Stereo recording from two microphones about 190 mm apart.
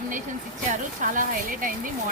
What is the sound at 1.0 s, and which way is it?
Speech, 45° right (ahead or behind).